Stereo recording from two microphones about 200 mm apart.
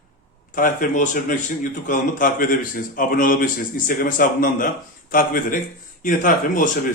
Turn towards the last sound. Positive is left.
turn(degrees=40)  # may be behind; listen again after turning